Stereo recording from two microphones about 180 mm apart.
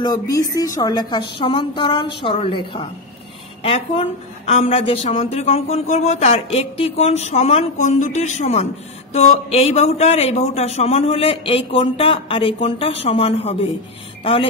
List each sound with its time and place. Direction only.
0.0 s a woman's voice: 20° left (ahead or behind)